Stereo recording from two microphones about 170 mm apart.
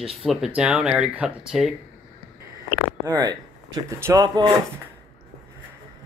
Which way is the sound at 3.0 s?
20° right (ahead or behind).